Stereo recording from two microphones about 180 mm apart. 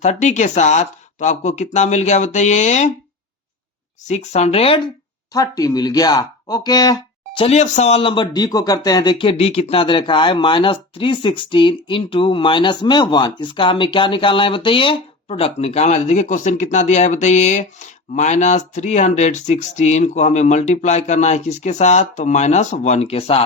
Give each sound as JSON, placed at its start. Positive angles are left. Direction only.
{"t": 0.0, "sound": "speech", "side_deg": 40}
{"t": 4.1, "sound": "speech", "side_deg": 40}
{"t": 5.3, "sound": "speech", "side_deg": 20}
{"t": 7.4, "sound": "speech", "side_deg": 40}